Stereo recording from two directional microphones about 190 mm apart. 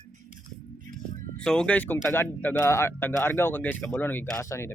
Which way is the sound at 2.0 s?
10° left (ahead or behind).